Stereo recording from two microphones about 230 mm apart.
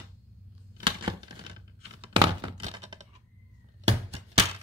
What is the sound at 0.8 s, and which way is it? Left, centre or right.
Tearing, centre.